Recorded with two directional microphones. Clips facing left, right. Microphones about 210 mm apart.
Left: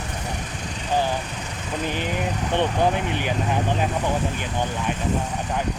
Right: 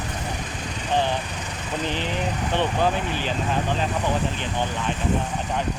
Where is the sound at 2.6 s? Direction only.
15° left (ahead or behind).